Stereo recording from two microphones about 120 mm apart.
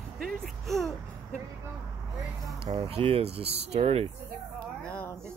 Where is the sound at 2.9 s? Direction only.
50° right (ahead or behind).